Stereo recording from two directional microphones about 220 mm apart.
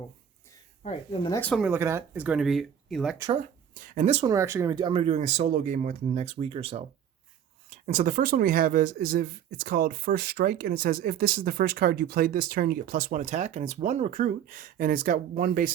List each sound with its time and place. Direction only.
0.9 s speech: 20° left (ahead or behind)
1.4 s speech: 5° left (ahead or behind)
1.6 s speech: 10° right (ahead or behind)
3.8 s speech: 35° right (ahead or behind)
4.3 s speech: 15° right (ahead or behind); by 15.7 s 40° right (ahead or behind)